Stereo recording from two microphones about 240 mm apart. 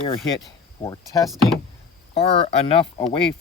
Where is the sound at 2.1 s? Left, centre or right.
Left.